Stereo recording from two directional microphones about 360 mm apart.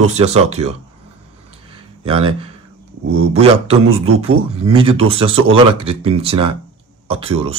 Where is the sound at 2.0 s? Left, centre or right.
Centre.